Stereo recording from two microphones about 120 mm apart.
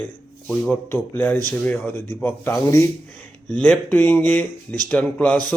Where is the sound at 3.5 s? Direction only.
10° left (ahead or behind).